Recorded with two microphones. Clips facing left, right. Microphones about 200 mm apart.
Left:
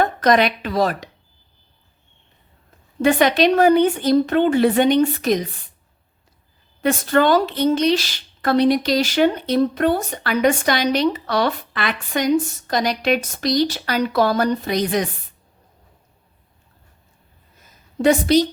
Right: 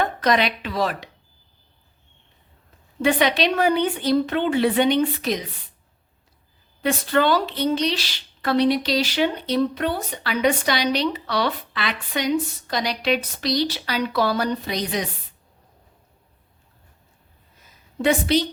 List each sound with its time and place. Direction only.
0.0 s speech: 45° left (ahead or behind)
3.0 s a woman's voice: 45° left (ahead or behind)
6.8 s a woman's voice: 45° left (ahead or behind)
18.0 s a woman's voice: 40° left (ahead or behind)